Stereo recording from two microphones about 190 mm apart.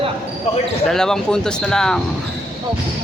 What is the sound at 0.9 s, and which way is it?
Speech, centre (ahead or behind).